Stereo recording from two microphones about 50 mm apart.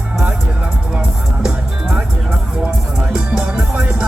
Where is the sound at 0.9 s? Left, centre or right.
Centre.